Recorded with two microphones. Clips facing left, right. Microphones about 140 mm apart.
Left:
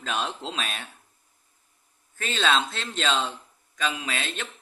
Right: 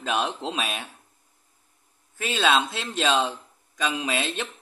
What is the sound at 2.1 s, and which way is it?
Speech, 10° right (ahead or behind).